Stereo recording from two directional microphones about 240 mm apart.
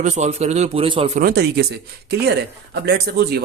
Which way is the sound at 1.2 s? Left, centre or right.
Right.